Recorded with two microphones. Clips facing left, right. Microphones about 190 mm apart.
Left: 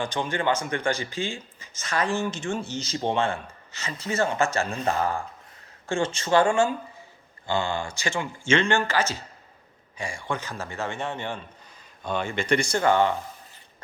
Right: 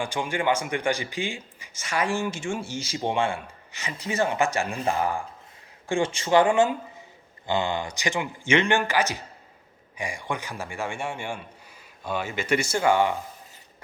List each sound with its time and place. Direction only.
0.0 s speech: 10° right (ahead or behind)